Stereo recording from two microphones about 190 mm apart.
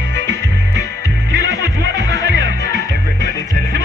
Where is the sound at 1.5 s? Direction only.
20° left (ahead or behind).